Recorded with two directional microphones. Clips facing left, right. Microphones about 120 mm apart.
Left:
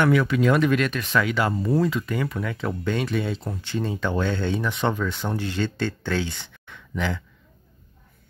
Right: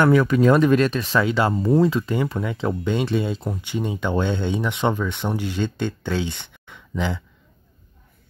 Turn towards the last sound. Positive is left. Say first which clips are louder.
# right 2 dB
turn(degrees=-15)  # may be behind; listen again after turning